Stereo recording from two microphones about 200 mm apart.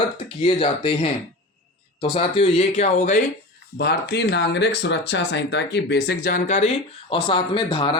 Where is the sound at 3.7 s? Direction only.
55° left (ahead or behind); by 8.0 s 25° left (ahead or behind).